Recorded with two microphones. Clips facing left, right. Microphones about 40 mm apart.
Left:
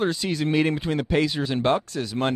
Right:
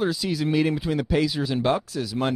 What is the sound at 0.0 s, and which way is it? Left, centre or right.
Speech, centre.